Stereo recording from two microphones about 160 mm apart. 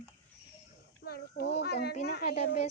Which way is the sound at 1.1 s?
85° left.